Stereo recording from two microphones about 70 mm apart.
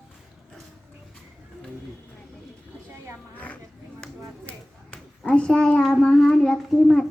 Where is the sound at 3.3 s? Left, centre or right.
Left.